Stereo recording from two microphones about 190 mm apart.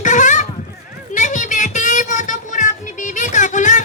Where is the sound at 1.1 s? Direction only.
40° left (ahead or behind).